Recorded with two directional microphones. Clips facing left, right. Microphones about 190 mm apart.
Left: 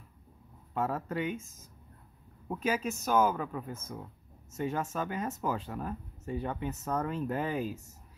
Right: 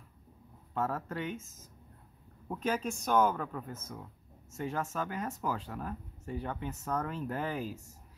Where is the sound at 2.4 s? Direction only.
10° left (ahead or behind).